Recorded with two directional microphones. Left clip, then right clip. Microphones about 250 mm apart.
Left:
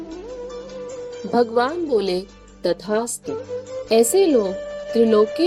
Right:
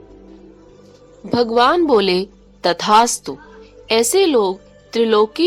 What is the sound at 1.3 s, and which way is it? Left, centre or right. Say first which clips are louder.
Speech: right 5 dB; right.